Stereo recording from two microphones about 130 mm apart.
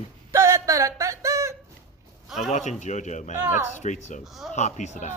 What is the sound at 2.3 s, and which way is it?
Speech, centre (ahead or behind).